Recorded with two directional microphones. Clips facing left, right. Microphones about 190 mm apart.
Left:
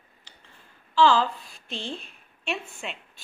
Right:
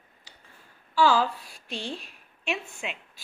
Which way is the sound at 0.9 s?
10° right (ahead or behind).